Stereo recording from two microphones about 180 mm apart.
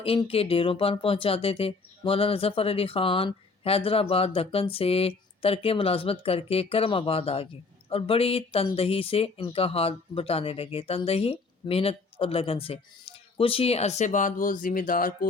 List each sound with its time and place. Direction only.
0.0 s speech: 30° left (ahead or behind); by 15.3 s 50° left (ahead or behind)